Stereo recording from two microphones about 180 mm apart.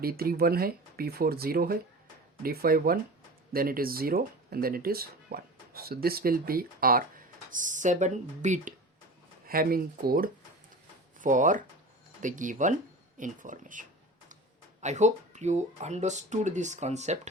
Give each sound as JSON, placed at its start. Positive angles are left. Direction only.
{"t": 0.0, "sound": "speech", "side_deg": -55}
{"t": 9.5, "sound": "speech", "side_deg": -55}